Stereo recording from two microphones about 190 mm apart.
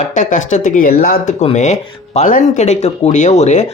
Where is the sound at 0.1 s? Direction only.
40° left (ahead or behind).